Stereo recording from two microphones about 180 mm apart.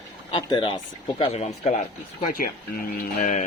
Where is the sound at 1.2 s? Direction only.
35° left (ahead or behind).